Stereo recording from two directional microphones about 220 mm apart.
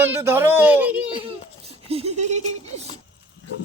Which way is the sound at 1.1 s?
20° right (ahead or behind).